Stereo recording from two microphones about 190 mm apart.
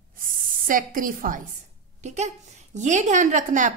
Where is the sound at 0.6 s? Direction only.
45° right (ahead or behind).